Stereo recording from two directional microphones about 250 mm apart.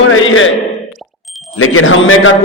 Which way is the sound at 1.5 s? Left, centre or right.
Left.